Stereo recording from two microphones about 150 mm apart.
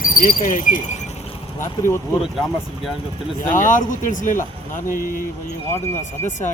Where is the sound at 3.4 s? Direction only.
60° left (ahead or behind).